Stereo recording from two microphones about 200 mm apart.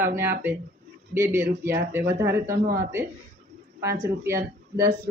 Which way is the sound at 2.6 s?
45° right (ahead or behind).